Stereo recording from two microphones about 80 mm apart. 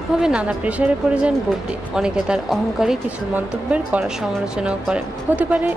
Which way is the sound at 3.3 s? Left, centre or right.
Centre.